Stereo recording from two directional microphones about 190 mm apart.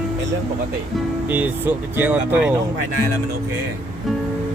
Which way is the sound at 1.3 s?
10° right (ahead or behind).